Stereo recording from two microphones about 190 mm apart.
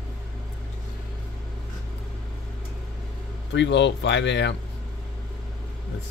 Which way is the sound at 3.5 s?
65° left (ahead or behind).